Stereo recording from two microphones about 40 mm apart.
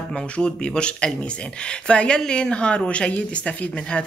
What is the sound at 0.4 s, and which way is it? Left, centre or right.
Speech, left.